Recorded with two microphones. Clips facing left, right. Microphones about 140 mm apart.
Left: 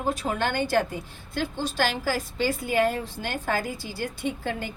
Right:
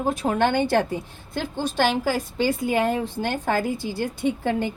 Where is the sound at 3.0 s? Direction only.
55° right (ahead or behind).